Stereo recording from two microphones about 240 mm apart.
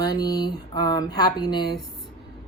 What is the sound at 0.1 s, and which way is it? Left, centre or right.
Speech, centre.